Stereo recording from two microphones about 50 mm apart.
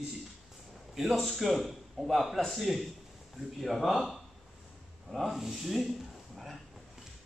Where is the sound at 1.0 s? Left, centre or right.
Centre.